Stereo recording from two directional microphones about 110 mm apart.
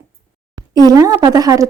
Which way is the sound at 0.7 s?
35° right (ahead or behind).